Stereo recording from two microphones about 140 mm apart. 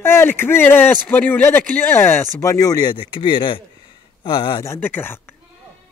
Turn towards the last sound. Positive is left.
turn(degrees=15)  # may be behind; listen again after turning